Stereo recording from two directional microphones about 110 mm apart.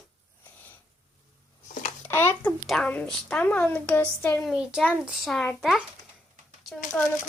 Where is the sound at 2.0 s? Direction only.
20° left (ahead or behind).